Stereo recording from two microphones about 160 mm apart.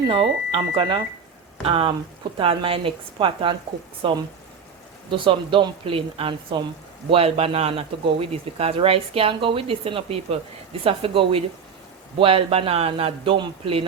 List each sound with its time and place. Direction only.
0.1 s speech: 30° right (ahead or behind)